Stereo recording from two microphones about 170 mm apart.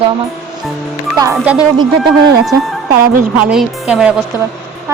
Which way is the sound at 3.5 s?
5° right (ahead or behind).